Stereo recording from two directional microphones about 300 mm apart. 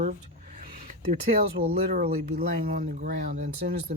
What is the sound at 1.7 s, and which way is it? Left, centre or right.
Speech, right.